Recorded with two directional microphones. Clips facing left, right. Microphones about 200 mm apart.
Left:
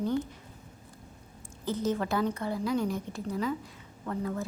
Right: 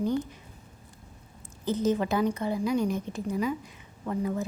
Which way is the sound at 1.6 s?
20° right (ahead or behind).